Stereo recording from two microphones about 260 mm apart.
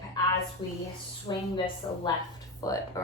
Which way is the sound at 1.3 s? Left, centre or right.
Centre.